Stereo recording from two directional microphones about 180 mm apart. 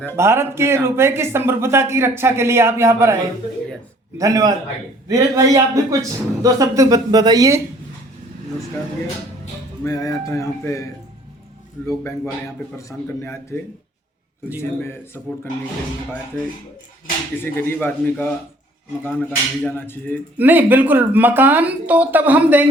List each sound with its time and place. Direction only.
0.2 s speech: 15° right (ahead or behind)
4.2 s a man's voice: 20° right (ahead or behind)
9.8 s speech: 20° left (ahead or behind)
11.9 s speech: 15° left (ahead or behind)
14.6 s speech: 15° left (ahead or behind)
17.4 s speech: 10° left (ahead or behind)
20.4 s speech: 10° right (ahead or behind)